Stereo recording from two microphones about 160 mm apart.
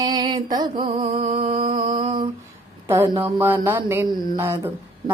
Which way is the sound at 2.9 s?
15° right (ahead or behind).